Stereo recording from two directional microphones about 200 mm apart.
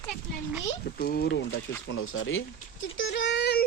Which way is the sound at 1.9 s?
90° left.